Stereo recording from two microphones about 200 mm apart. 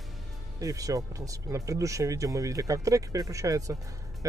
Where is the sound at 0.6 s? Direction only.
15° right (ahead or behind).